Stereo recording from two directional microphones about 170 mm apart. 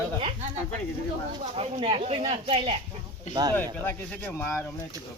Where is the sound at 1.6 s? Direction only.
30° right (ahead or behind).